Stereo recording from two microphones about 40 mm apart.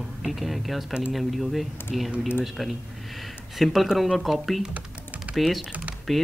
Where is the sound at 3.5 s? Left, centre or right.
Centre.